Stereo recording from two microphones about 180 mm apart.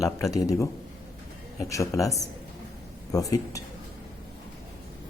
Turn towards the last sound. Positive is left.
turn(degrees=20)  # may be behind; listen again after turning